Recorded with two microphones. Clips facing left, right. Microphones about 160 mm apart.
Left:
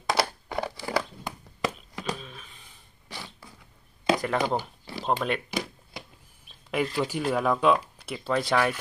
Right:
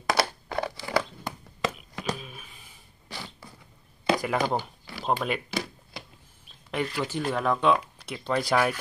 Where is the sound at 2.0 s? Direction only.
5° right (ahead or behind).